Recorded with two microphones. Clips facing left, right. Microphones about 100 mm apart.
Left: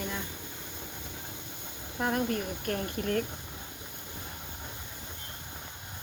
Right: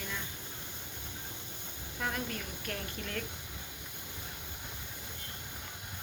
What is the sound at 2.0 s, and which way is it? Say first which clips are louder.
Speech: left 8 dB; 45° left (ahead or behind).